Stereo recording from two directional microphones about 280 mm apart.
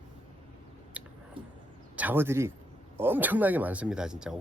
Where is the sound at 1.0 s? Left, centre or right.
Centre.